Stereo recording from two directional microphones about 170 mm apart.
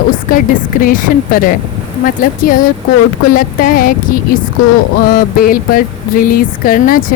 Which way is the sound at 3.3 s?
60° left (ahead or behind).